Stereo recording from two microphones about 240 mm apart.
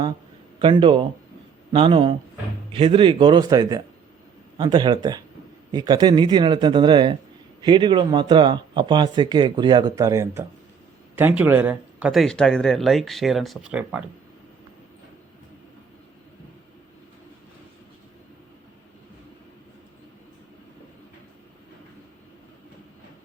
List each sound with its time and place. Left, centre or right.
0.6 s speech: right; by 14.0 s centre